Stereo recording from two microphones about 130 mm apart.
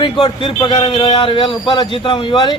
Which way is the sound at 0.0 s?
40° left (ahead or behind).